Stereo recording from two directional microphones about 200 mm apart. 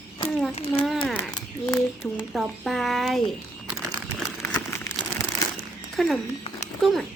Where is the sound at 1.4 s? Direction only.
15° left (ahead or behind).